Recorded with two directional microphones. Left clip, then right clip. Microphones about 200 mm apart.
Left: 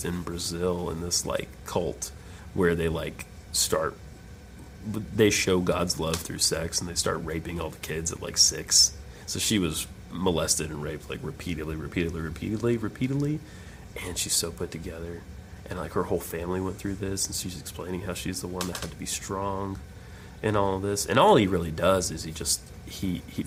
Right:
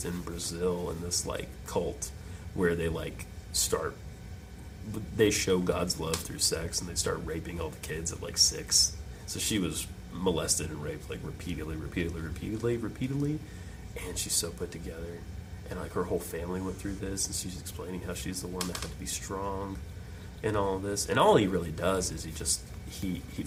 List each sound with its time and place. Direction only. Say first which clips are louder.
0.0 s speech: left 4 dB; 35° left (ahead or behind)
5.1 s speech: left 4 dB; 35° left (ahead or behind)